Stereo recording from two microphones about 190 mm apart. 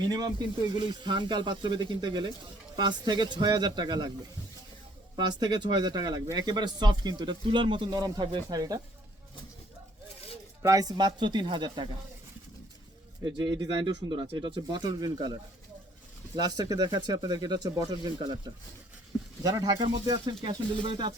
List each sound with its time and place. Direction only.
0.1 s speech: 20° right (ahead or behind)
5.1 s speech: 20° right (ahead or behind)
10.6 s speech: 20° right (ahead or behind)
13.2 s speech: 25° right (ahead or behind)